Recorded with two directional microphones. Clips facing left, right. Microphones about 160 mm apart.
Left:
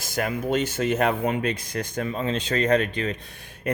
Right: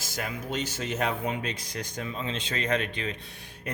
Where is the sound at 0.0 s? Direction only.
55° left (ahead or behind).